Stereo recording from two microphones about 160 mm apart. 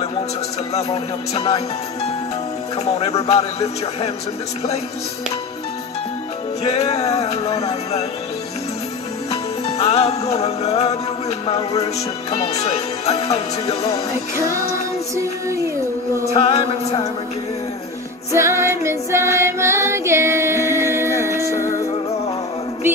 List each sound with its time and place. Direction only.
0.7 s music: 40° left (ahead or behind)
2.8 s music: 40° left (ahead or behind)
6.6 s music: 40° left (ahead or behind)
9.3 s music: 40° left (ahead or behind)
14.4 s music: 20° left (ahead or behind)
16.3 s music: 40° left (ahead or behind)
18.3 s music: 15° right (ahead or behind)